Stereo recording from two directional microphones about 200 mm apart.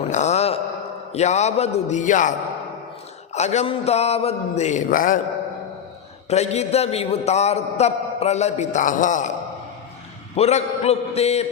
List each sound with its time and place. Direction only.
0.1 s mantra: 35° left (ahead or behind)
1.1 s a man's voice: 35° left (ahead or behind)
3.3 s a man's voice: 35° left (ahead or behind)
6.3 s a man's voice: 35° left (ahead or behind)
10.3 s a man's voice: 30° left (ahead or behind)